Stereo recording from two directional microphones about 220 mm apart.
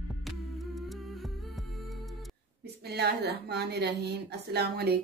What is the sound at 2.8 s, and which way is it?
Speech, 50° right (ahead or behind).